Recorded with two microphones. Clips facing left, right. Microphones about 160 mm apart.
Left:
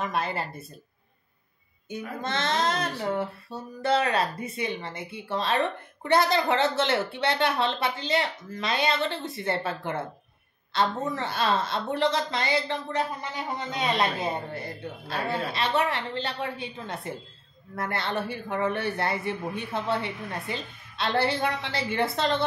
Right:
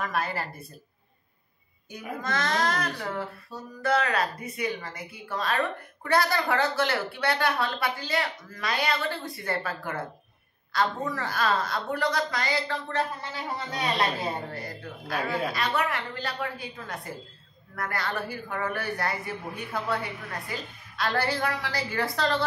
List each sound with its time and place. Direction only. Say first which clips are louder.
0.0 s speech: left 1 dB; 20° left (ahead or behind)
1.9 s speech: left 1 dB; 25° left (ahead or behind)